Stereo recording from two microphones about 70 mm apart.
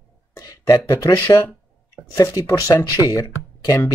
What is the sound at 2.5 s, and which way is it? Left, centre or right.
Speech, left.